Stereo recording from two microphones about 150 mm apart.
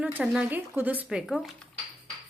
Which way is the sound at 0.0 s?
10° right (ahead or behind).